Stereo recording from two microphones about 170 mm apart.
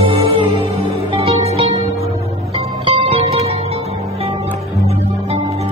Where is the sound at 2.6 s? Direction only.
35° right (ahead or behind).